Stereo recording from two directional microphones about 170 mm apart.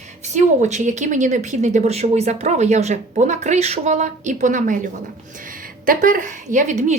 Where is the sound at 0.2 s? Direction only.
45° right (ahead or behind).